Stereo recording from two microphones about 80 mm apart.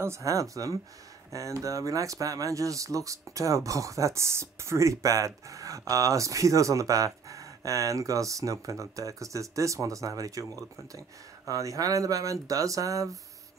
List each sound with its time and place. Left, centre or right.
0.0 s speech: right